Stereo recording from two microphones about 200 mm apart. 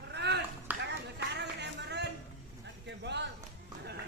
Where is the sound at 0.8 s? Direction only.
55° right (ahead or behind).